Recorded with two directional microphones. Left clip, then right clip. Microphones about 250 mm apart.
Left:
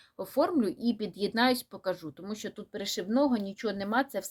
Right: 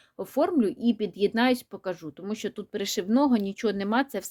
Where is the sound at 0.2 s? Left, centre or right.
Right.